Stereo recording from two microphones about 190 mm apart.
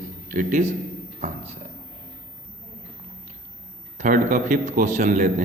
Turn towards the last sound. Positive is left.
turn(degrees=-40)  # may be behind; listen again after turning